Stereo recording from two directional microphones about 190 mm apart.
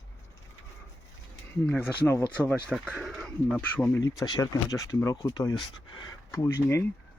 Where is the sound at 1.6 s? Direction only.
10° left (ahead or behind).